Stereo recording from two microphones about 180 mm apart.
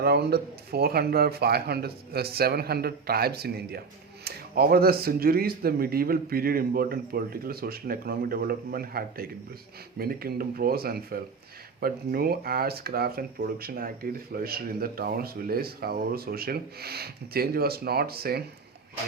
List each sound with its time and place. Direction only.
0.0 s speech: 60° right (ahead or behind)